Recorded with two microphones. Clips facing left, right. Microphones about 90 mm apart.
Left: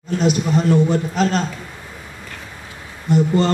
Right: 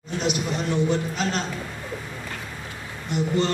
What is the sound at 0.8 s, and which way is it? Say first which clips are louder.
Speech: left 6 dB; 40° left (ahead or behind).